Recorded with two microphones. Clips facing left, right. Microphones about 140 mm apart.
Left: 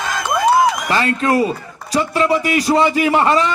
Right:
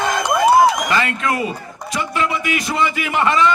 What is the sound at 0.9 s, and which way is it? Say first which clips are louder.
A man's voice: left 3 dB; 35° left (ahead or behind).